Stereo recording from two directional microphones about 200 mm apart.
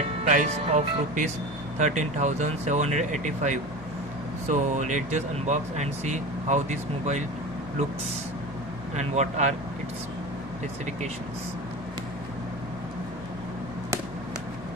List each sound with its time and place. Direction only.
0.3 s speech: 35° right (ahead or behind)
9.0 s speech: 35° right (ahead or behind)